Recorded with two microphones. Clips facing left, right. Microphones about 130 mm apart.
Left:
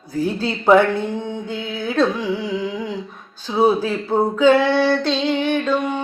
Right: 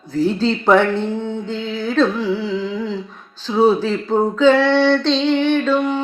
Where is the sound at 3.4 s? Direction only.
10° left (ahead or behind).